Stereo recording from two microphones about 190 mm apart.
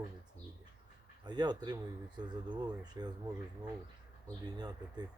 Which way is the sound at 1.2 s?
20° right (ahead or behind).